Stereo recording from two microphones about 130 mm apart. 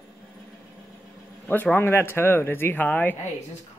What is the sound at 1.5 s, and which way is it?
Speech, 15° left (ahead or behind).